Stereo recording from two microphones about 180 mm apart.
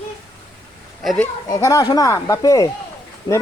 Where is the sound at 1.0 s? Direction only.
Centre (ahead or behind).